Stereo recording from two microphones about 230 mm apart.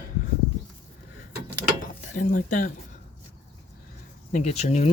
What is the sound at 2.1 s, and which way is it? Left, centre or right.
Speech, left.